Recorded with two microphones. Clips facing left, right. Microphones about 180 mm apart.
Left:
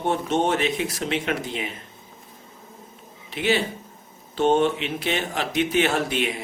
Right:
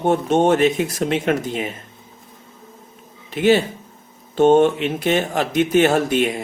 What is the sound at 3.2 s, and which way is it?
Speech, 45° right (ahead or behind).